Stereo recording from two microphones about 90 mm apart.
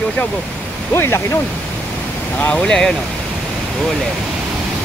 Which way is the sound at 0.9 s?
30° left (ahead or behind).